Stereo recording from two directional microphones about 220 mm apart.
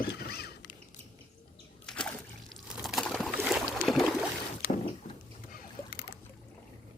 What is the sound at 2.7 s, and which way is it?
Pour, centre (ahead or behind).